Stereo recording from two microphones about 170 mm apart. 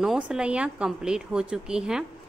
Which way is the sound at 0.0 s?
5° right (ahead or behind).